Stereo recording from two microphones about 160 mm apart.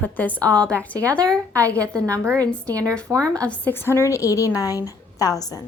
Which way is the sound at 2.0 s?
20° right (ahead or behind).